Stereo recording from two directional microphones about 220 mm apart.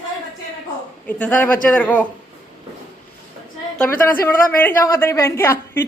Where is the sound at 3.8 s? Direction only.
10° left (ahead or behind).